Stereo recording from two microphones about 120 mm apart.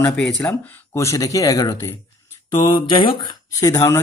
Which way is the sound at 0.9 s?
25° left (ahead or behind).